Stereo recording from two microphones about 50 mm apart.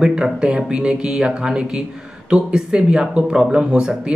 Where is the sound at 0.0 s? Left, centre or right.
Centre.